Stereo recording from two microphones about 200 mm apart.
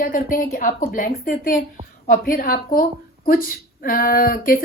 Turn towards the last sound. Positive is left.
turn(degrees=45)  # may be behind; listen again after turning